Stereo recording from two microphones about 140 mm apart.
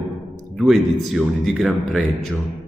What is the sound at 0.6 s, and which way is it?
A man's voice, 5° right (ahead or behind).